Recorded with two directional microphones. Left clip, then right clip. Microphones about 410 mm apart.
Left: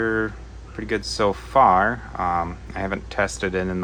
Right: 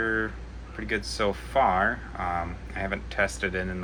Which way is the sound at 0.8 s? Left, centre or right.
Left.